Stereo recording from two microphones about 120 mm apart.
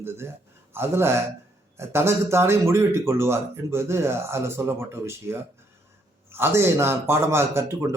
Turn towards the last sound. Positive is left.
turn(degrees=-20)  # may be behind; listen again after turning